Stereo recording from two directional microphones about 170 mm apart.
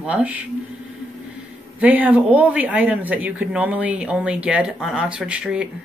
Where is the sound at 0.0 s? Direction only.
10° right (ahead or behind).